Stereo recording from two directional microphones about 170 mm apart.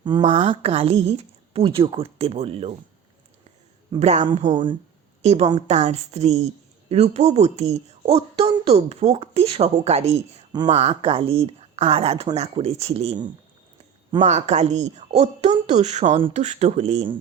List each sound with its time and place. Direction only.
0.3 s speech: 35° right (ahead or behind)
4.0 s a woman's voice: 40° right (ahead or behind)
14.2 s speech: 40° right (ahead or behind)